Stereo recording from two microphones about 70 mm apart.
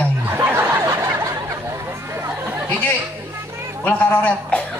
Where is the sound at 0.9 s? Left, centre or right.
Right.